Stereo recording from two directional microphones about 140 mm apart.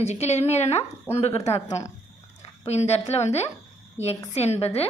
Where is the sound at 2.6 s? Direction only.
50° left (ahead or behind).